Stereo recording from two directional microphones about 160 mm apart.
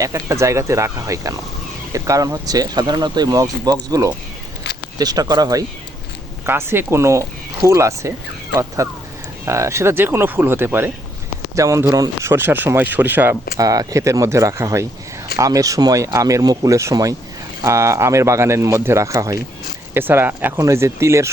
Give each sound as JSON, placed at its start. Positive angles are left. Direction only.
{"t": 0.0, "sound": "speech", "side_deg": -20}
{"t": 13.6, "sound": "speech", "side_deg": -20}